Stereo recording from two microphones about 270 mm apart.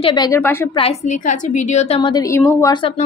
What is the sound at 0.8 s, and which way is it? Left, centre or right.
A woman's voice, left.